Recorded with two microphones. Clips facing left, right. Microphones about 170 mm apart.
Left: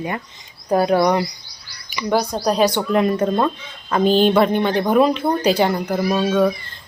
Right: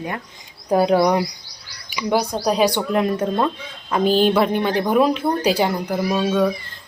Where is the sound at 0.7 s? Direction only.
10° right (ahead or behind).